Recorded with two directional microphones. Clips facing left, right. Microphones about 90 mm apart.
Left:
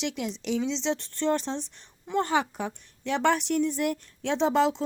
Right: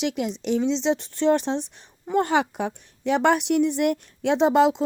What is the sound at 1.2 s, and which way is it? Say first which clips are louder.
Speech: right 6 dB; 65° right (ahead or behind).